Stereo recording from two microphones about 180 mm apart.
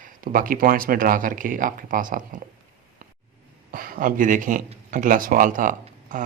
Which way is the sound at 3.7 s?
50° right (ahead or behind).